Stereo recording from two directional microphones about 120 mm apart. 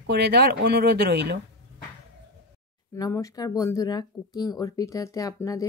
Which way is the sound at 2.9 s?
25° left (ahead or behind).